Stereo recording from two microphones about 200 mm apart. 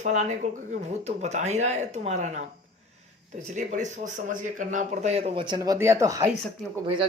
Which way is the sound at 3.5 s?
40° right (ahead or behind).